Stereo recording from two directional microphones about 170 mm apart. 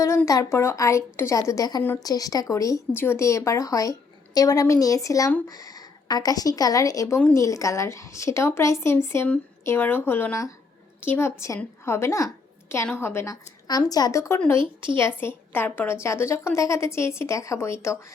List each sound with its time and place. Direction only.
0.0 s a woman's voice: 20° left (ahead or behind)
14.6 s speech: 30° right (ahead or behind)
14.9 s a woman's voice: 15° left (ahead or behind)